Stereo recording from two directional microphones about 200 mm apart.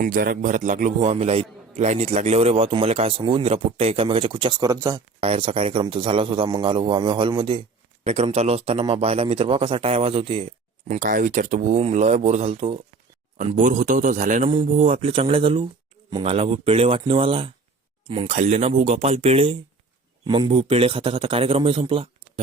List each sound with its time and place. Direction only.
0.0 s a man's voice: 45° right (ahead or behind); by 5.0 s 15° right (ahead or behind)
5.2 s a man's voice: 30° right (ahead or behind)